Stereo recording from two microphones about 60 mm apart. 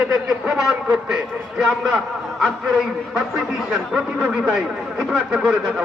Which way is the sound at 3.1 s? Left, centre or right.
Centre.